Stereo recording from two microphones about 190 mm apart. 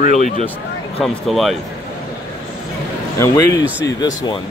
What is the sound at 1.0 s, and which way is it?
Speech, centre (ahead or behind).